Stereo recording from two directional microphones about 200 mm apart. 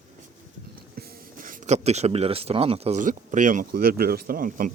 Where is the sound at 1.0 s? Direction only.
45° right (ahead or behind).